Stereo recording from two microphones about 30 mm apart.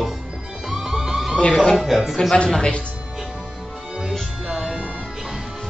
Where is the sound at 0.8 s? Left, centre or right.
Centre.